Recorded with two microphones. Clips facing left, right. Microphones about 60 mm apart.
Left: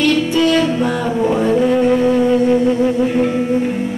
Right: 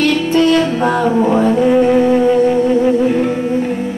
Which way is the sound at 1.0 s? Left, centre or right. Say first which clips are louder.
Right 4 dB; centre.